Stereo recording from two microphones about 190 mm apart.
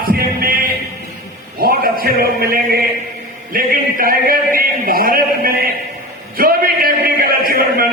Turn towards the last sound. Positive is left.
turn(degrees=-50)  # may be behind; listen again after turning